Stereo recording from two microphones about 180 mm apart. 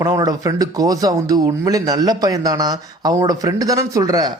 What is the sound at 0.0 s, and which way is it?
Speech, 20° right (ahead or behind).